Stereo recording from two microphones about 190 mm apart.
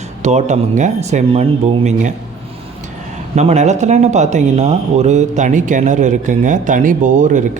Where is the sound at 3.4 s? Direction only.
35° right (ahead or behind).